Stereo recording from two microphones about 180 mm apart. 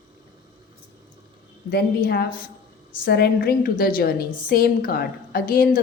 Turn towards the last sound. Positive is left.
turn(degrees=55)  # may be behind; listen again after turning